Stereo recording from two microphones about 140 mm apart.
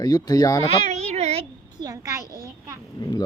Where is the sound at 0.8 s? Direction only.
55° right (ahead or behind).